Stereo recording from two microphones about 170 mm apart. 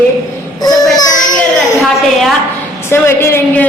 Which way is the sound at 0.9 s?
25° left (ahead or behind).